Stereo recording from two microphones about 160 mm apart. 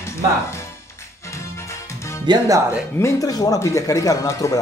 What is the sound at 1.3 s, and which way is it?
Music, 15° left (ahead or behind).